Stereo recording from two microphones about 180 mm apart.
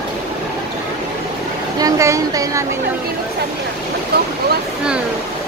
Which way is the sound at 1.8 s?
20° right (ahead or behind).